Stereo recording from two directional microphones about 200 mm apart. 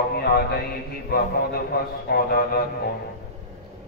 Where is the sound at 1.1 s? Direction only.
50° left (ahead or behind).